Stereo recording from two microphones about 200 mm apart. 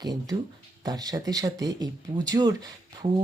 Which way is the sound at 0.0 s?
20° right (ahead or behind).